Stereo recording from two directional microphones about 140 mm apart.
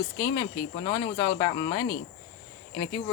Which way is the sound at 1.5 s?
35° left (ahead or behind).